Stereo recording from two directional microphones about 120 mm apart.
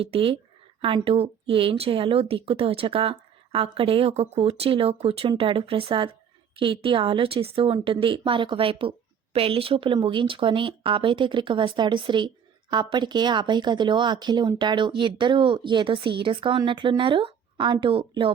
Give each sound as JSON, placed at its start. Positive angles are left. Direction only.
{"t": 0.0, "sound": "a woman's voice", "side_deg": -50}